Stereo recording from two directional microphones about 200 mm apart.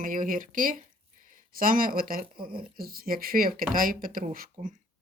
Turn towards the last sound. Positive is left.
turn(degrees=-45)  # may be behind; listen again after turning